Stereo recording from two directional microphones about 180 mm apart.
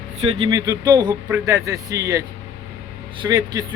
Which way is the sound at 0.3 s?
30° right (ahead or behind).